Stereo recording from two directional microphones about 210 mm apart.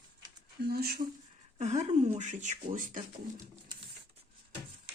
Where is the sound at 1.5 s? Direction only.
35° right (ahead or behind).